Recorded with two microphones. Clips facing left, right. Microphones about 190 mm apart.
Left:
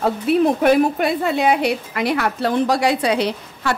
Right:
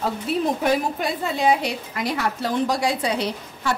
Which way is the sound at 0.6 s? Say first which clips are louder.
Left 7 dB; 65° left (ahead or behind).